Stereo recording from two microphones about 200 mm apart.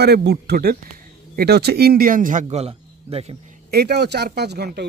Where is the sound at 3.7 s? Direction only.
55° right (ahead or behind).